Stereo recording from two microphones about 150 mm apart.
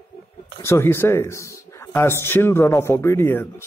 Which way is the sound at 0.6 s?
15° left (ahead or behind).